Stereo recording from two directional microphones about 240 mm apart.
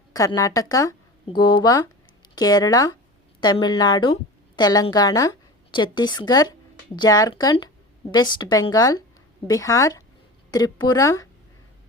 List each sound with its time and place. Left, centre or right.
0.1 s speech: centre